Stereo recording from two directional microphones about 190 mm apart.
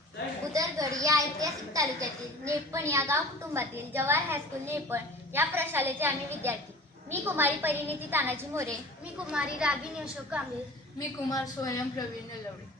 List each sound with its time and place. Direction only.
0.5 s a woman's voice: 15° right (ahead or behind)
11.3 s a woman's voice: 20° left (ahead or behind)